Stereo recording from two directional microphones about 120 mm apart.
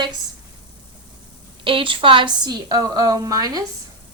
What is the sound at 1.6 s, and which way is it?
A woman's voice, 45° right (ahead or behind).